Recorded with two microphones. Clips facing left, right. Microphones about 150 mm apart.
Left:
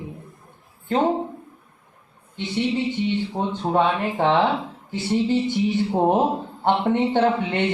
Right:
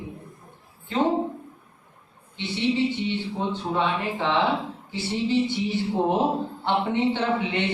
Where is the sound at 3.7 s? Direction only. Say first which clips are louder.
Left 6 dB; 50° left (ahead or behind).